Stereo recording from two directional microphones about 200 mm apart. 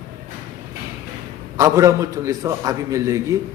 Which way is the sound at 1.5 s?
15° right (ahead or behind).